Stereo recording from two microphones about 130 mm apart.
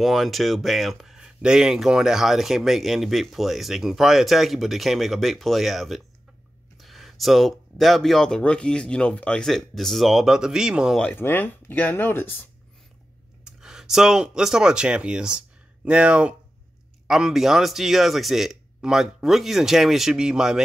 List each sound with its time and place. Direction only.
0.0 s speech: centre (ahead or behind)
11.1 s speech: 15° left (ahead or behind)
13.5 s speech: 5° right (ahead or behind)